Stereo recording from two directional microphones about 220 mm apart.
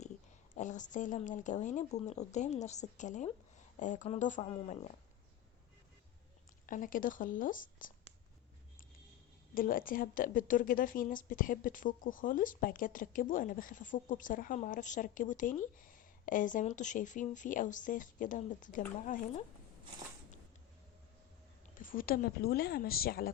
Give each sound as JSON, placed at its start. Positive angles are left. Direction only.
{"t": 0.5, "sound": "a woman's voice", "side_deg": 35}
{"t": 6.7, "sound": "a woman's voice", "side_deg": 35}
{"t": 9.6, "sound": "a woman's voice", "side_deg": 40}
{"t": 21.8, "sound": "speech", "side_deg": 40}